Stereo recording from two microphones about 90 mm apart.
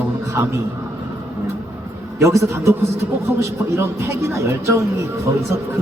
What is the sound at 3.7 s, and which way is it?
Speech, 30° right (ahead or behind).